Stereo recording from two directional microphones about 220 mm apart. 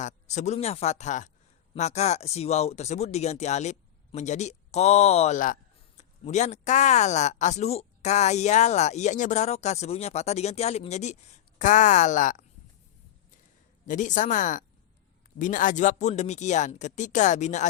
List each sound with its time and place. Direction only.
0.0 s speech: 35° left (ahead or behind)
13.8 s speech: 35° left (ahead or behind)